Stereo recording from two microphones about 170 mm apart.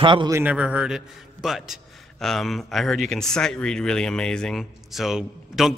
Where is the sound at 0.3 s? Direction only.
10° right (ahead or behind).